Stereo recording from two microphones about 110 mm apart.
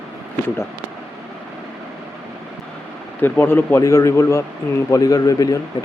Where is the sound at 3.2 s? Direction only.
20° left (ahead or behind).